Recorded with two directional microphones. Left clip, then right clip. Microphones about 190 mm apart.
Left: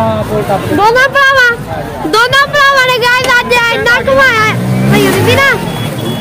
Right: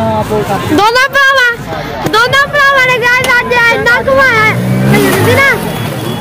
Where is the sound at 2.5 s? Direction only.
15° left (ahead or behind).